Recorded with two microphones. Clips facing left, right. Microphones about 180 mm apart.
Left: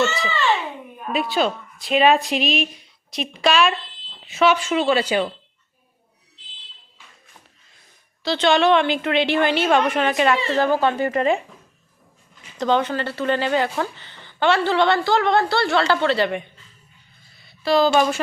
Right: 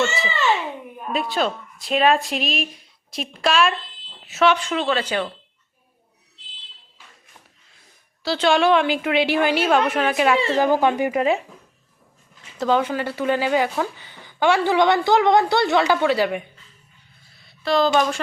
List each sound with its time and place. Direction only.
0.2 s speech: 10° right (ahead or behind); by 5.3 s 10° left (ahead or behind)
8.2 s speech: 5° right (ahead or behind)
12.5 s speech: 5° right (ahead or behind)
17.3 s a sound: centre (ahead or behind)